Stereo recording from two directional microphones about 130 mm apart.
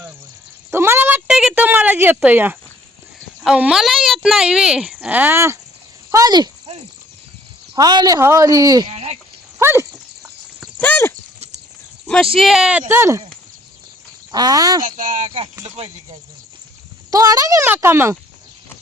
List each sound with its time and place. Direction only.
0.7 s a sound: 20° right (ahead or behind)
3.4 s speech: 5° right (ahead or behind); by 6.5 s 30° right (ahead or behind)
7.8 s speech: 30° right (ahead or behind)
8.9 s speech: 55° right (ahead or behind)
9.6 s speech: 20° right (ahead or behind)
10.8 s speech: 15° left (ahead or behind)
12.0 s speech: 5° left (ahead or behind)
12.9 s speech: 20° right (ahead or behind)
14.3 s speech: 30° right (ahead or behind)
14.8 s speech: 85° right
15.6 s speech: 50° right (ahead or behind)
17.1 s speech: 30° right (ahead or behind)